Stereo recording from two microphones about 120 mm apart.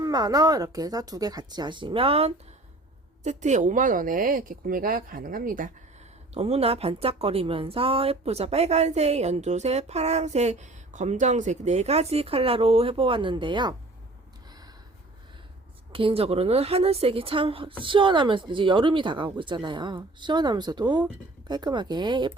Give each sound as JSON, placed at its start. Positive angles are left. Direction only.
{"t": 0.0, "sound": "speech", "side_deg": -35}
{"t": 3.2, "sound": "speech", "side_deg": -80}
{"t": 6.3, "sound": "a woman's voice", "side_deg": -55}
{"t": 15.9, "sound": "a woman's voice", "side_deg": -50}